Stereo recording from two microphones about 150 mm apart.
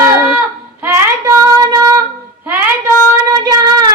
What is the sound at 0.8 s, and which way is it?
Child singing, 15° right (ahead or behind).